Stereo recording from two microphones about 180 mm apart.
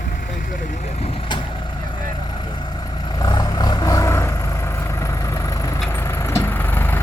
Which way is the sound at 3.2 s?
20° left (ahead or behind).